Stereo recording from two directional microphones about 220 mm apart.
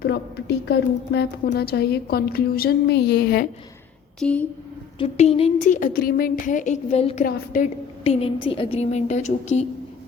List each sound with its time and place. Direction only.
0.0 s a woman's voice: 50° left (ahead or behind)
4.2 s a woman's voice: 5° left (ahead or behind)
4.9 s speech: 30° left (ahead or behind)
7.3 s speech: 40° left (ahead or behind)
8.0 s a woman's voice: 25° left (ahead or behind)